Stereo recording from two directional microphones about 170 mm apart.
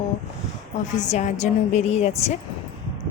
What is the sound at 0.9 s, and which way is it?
A woman's voice, 45° left (ahead or behind).